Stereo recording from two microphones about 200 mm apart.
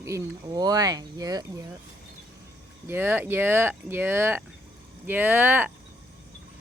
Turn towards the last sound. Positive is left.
turn(degrees=-10)  # may be behind; listen again after turning